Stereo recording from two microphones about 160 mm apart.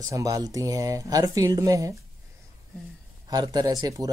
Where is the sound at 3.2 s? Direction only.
25° right (ahead or behind).